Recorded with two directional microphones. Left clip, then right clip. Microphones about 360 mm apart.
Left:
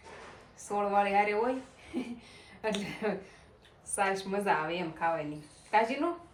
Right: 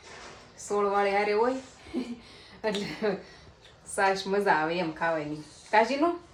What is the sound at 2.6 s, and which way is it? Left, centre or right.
A woman's voice, centre.